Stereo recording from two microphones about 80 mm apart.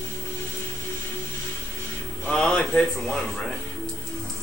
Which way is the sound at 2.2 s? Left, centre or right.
Centre.